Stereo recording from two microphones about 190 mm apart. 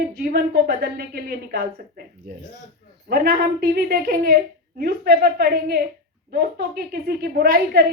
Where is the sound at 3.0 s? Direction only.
50° right (ahead or behind).